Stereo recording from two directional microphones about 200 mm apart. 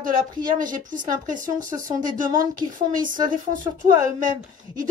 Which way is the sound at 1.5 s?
20° right (ahead or behind).